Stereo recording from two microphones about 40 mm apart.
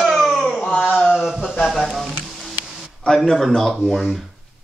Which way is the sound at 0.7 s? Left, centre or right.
Left.